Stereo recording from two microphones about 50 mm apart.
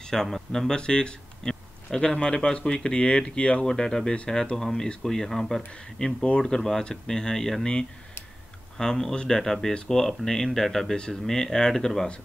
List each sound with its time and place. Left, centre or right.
0.0 s speech: centre